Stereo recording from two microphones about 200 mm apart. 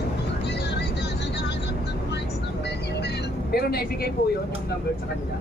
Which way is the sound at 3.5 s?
50° left (ahead or behind).